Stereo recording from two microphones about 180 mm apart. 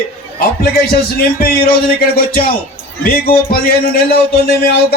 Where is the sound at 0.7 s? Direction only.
55° left (ahead or behind).